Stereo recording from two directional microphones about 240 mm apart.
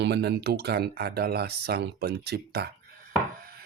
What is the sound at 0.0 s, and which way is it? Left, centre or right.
Speech, right.